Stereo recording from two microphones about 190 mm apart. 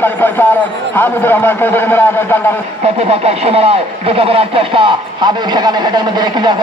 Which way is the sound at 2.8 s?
30° right (ahead or behind).